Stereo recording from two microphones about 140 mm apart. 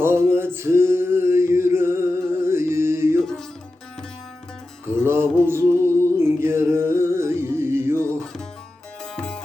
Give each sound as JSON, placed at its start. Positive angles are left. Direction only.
{"t": 0.0, "sound": "male singing", "side_deg": -15}
{"t": 3.2, "sound": "music", "side_deg": 5}
{"t": 4.9, "sound": "mantra", "side_deg": -15}
{"t": 6.1, "sound": "music", "side_deg": -20}
{"t": 9.1, "sound": "music", "side_deg": 5}